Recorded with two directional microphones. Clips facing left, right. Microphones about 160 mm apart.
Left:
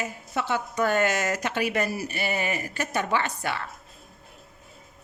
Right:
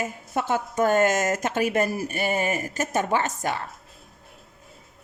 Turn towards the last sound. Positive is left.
turn(degrees=-45)  # may be behind; listen again after turning